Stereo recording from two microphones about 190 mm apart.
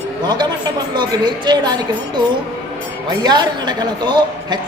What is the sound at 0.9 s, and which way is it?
A woman's voice, 25° right (ahead or behind).